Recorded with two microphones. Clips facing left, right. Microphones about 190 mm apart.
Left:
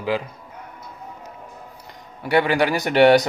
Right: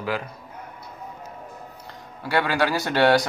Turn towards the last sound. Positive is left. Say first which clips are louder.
# left 5 dB
turn(degrees=20)  # may be behind; listen again after turning